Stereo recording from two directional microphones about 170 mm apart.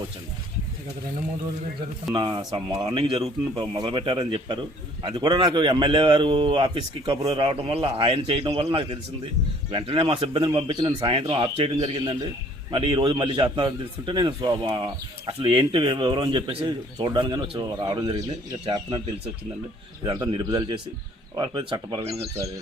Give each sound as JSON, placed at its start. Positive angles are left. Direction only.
{"t": 2.1, "sound": "a man's voice", "side_deg": -25}
{"t": 20.1, "sound": "a man's voice", "side_deg": -25}